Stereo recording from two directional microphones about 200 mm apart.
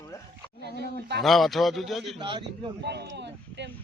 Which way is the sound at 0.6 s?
55° right (ahead or behind).